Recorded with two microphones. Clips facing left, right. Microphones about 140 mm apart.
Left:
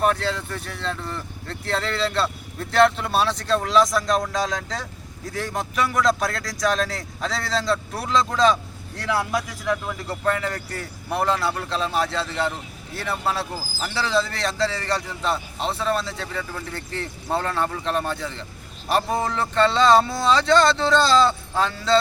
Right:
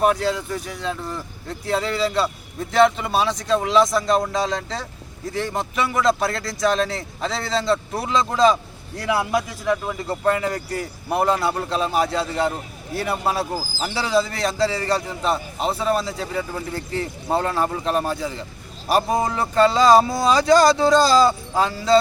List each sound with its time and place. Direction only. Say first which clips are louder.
0.0 s speech: right 3 dB; 10° right (ahead or behind)